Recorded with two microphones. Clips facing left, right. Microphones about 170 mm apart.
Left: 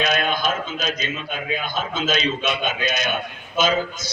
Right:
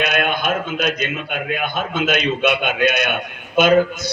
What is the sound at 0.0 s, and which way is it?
A man's voice, 60° right (ahead or behind).